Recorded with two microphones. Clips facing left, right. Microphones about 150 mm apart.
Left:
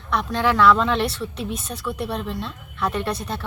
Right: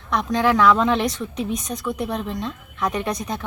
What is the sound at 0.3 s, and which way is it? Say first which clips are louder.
Speech: right 1 dB; 10° right (ahead or behind).